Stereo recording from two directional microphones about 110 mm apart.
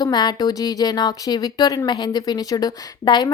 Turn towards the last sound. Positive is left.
turn(degrees=40)  # may be behind; listen again after turning